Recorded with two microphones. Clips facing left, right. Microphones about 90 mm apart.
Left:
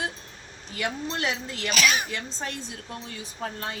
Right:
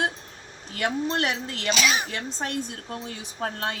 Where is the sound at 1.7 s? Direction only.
25° right (ahead or behind).